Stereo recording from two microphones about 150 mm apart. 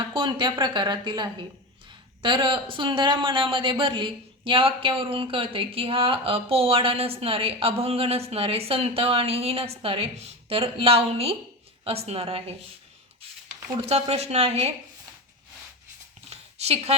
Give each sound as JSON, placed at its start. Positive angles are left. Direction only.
{"t": 0.1, "sound": "speech", "side_deg": -30}
{"t": 13.8, "sound": "a woman's voice", "side_deg": -45}
{"t": 16.3, "sound": "a sound", "side_deg": -45}